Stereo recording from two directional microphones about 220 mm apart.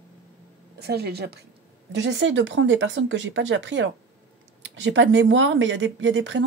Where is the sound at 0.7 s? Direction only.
45° right (ahead or behind).